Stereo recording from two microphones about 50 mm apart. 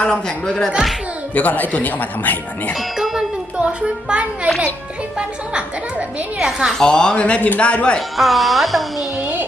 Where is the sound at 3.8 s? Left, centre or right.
Right.